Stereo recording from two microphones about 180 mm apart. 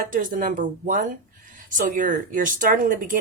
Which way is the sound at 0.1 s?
50° right (ahead or behind).